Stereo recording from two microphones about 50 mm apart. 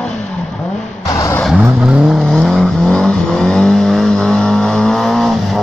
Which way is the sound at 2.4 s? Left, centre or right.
Centre.